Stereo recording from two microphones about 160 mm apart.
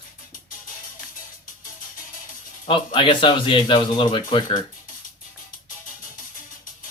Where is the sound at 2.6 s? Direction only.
30° left (ahead or behind).